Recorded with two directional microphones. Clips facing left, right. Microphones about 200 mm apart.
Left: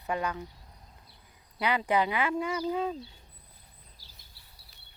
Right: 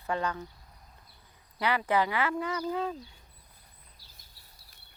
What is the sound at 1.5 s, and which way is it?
Speech, 15° left (ahead or behind).